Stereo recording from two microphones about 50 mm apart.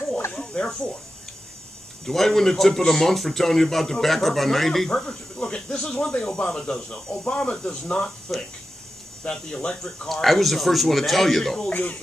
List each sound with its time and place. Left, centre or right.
0.3 s snake: centre
2.0 s a man's voice: centre
4.8 s speech: centre
8.3 s a man's voice: centre
9.2 s speech: centre
10.0 s a man's voice: centre
11.7 s speech: left